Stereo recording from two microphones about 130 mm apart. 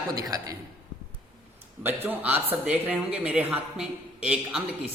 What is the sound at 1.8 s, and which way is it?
Speech, 15° right (ahead or behind).